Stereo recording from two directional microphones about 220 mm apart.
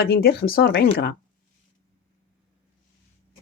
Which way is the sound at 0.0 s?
45° left (ahead or behind).